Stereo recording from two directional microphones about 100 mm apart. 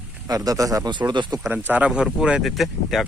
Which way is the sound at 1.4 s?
20° right (ahead or behind).